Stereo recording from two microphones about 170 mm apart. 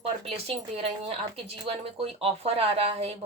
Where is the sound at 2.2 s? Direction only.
35° right (ahead or behind).